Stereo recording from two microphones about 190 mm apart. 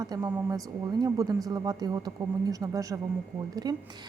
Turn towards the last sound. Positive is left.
turn(degrees=-20)  # may be behind; listen again after turning